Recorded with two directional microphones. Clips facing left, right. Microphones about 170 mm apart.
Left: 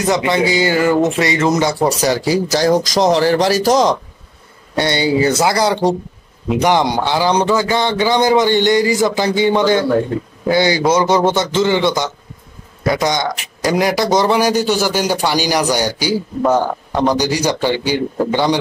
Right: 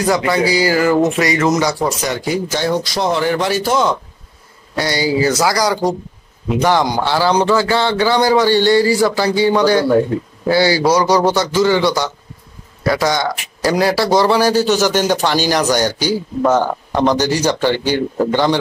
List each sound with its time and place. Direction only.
0.0 s a man's voice: 20° left (ahead or behind); by 3.9 s 40° left (ahead or behind)
4.7 s a man's voice: 25° left (ahead or behind)